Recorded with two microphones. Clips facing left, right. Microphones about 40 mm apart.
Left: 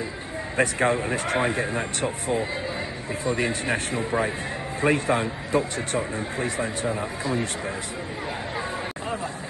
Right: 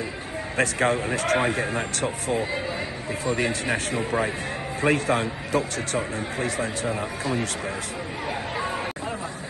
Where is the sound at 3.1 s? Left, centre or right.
Right.